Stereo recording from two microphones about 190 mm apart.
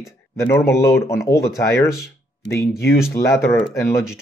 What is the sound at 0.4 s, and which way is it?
Speech, 15° left (ahead or behind).